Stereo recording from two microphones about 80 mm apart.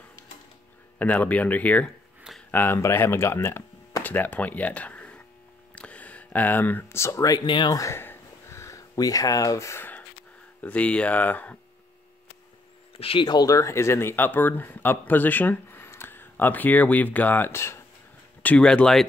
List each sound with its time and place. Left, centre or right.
0.9 s speech: left
7.4 s speech: left
7.7 s speech: left
8.0 s a sound: left
10.6 s speech: centre
13.2 s speech: left
18.4 s speech: centre